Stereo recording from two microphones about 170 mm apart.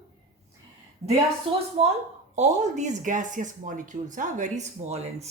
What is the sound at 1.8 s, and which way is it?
Speech, 35° right (ahead or behind).